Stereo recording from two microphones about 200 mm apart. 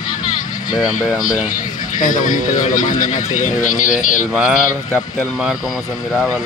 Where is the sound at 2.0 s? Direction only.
40° left (ahead or behind).